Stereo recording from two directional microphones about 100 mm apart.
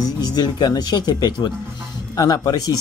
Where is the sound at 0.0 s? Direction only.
40° left (ahead or behind).